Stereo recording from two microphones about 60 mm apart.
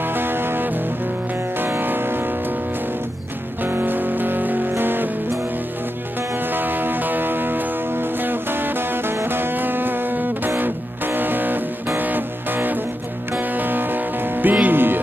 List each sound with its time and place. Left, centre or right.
0.0 s music: right
3.6 s music: right
6.5 s music: right